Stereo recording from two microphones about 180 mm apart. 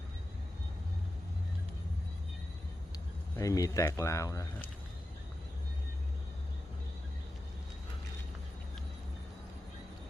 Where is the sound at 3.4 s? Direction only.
20° left (ahead or behind).